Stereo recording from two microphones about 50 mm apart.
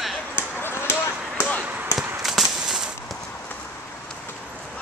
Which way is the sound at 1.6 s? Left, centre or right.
Right.